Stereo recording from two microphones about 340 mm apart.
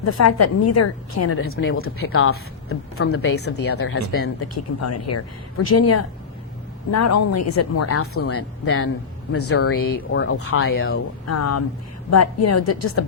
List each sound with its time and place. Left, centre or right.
0.0 s a woman's voice: left